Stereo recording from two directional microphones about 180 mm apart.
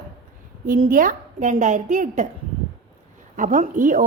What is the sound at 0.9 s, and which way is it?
A woman's voice, 50° right (ahead or behind).